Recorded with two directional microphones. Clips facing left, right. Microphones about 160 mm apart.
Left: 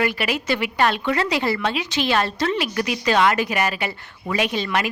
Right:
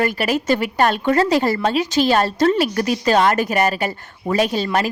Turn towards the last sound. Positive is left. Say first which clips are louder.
# right 4 dB
turn(degrees=-40)  # may be behind; listen again after turning